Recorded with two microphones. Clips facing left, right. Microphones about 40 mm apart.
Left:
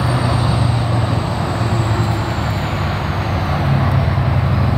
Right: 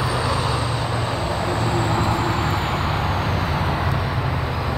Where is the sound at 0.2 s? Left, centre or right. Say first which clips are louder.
Left 3 dB; centre.